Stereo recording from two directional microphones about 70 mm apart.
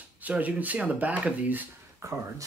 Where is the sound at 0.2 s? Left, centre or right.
Right.